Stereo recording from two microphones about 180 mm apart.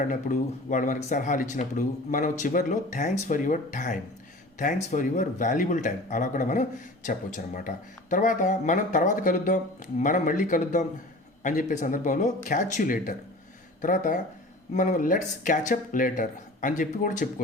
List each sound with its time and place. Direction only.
0.0 s speech: 45° left (ahead or behind)